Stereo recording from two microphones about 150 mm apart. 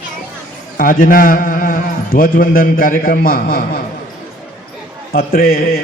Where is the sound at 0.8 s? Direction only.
65° left (ahead or behind).